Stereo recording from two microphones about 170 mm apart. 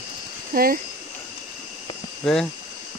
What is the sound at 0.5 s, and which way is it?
Speech, 60° right (ahead or behind).